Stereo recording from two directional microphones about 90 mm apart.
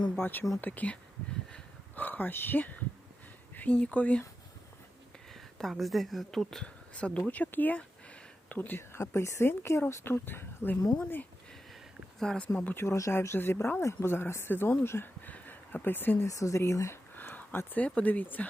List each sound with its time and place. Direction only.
0.2 s speech: 20° left (ahead or behind)
2.0 s speech: 20° left (ahead or behind)
5.3 s speech: 5° left (ahead or behind); by 10.8 s 25° left (ahead or behind)
12.2 s speech: 5° left (ahead or behind)
12.7 s speech: 30° left (ahead or behind)
14.8 s a sound: 25° left (ahead or behind)
16.2 s speech: 35° left (ahead or behind)
17.2 s speech: 20° left (ahead or behind)